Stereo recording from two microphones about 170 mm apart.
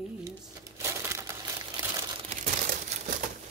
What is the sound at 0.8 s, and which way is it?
Crumpling, 15° right (ahead or behind).